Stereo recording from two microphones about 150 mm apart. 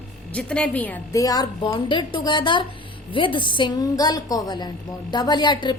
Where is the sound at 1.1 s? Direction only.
25° left (ahead or behind).